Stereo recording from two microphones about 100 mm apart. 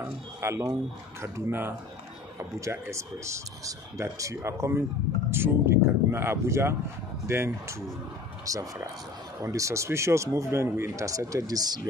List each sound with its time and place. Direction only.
0.0 s speech: 25° right (ahead or behind)